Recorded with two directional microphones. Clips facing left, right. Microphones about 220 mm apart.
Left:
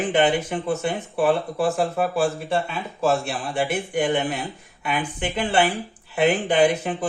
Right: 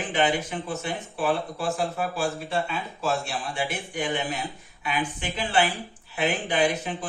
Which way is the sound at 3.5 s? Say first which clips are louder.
Left 10 dB; 60° left (ahead or behind).